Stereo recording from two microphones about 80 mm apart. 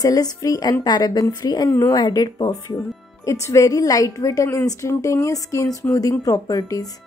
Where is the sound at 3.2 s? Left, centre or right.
Left.